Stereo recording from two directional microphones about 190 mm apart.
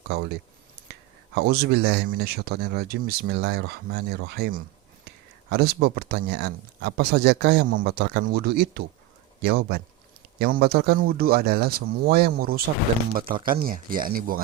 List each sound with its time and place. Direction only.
0.1 s speech: 55° right (ahead or behind)
0.8 s whispering: 55° right (ahead or behind)
1.4 s speech: 55° right (ahead or behind)